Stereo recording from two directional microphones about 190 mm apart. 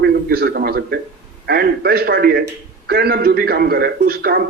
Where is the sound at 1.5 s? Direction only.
55° right (ahead or behind).